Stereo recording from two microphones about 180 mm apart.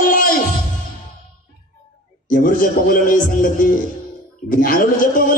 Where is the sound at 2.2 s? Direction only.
50° left (ahead or behind).